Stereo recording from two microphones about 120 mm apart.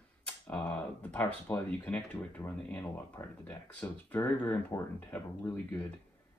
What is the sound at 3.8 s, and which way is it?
Speech, 15° left (ahead or behind).